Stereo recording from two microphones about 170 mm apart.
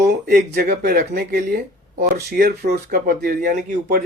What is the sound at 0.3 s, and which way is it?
Speech, 70° right (ahead or behind).